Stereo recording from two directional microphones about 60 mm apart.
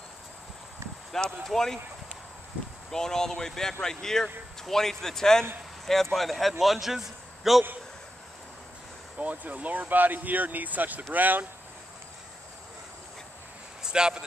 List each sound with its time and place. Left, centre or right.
1.1 s speech: centre
2.9 s a man's voice: centre
9.2 s speech: right
13.8 s speech: centre